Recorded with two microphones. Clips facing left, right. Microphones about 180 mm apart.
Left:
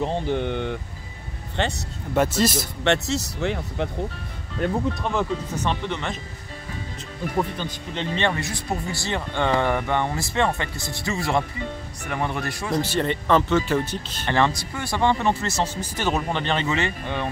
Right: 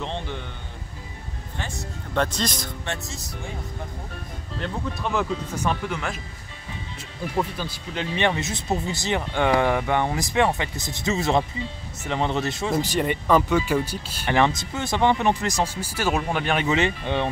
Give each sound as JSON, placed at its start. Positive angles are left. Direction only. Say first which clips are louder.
{"t": 0.0, "sound": "speech", "louder": "left 8 dB", "side_deg": 45}
{"t": 2.1, "sound": "speech", "louder": "left 4 dB", "side_deg": 5}
{"t": 2.8, "sound": "speech", "louder": "left 11 dB", "side_deg": 70}
{"t": 5.0, "sound": "speech", "louder": "left 1 dB", "side_deg": 0}
{"t": 7.3, "sound": "speech", "louder": "left 1 dB", "side_deg": -5}
{"t": 8.2, "sound": "speech", "louder": "right 2 dB", "side_deg": -20}